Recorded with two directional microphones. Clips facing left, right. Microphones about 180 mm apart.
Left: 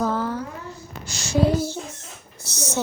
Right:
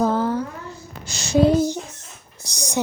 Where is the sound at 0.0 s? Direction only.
25° right (ahead or behind).